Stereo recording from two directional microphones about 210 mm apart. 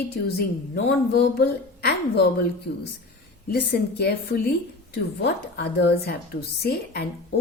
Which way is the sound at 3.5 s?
50° left (ahead or behind).